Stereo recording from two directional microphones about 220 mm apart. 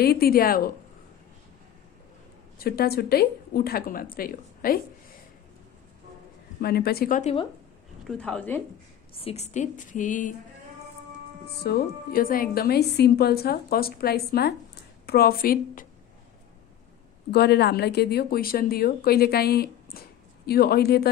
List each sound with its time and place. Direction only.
0.0 s a woman's voice: 45° left (ahead or behind)
2.6 s a woman's voice: 45° left (ahead or behind)
6.6 s a woman's voice: 45° left (ahead or behind)
8.0 s speech: 5° left (ahead or behind)
9.1 s a woman's voice: 30° left (ahead or behind)
11.4 s a woman's voice: 45° left (ahead or behind)
17.3 s a woman's voice: 50° left (ahead or behind)